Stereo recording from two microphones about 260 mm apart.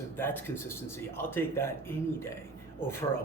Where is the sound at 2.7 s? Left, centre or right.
Centre.